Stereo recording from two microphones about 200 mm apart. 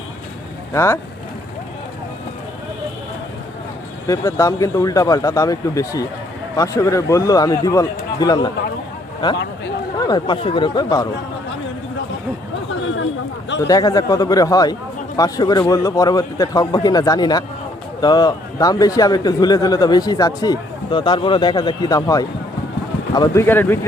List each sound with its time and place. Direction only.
0.7 s speech: 15° left (ahead or behind)
4.0 s a man's voice: 15° left (ahead or behind)
13.6 s a man's voice: 20° left (ahead or behind)